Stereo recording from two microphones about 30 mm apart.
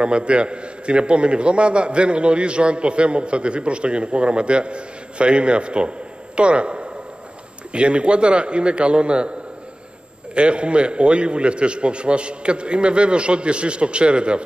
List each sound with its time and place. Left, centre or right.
0.0 s a man's voice: right
10.3 s a man's voice: right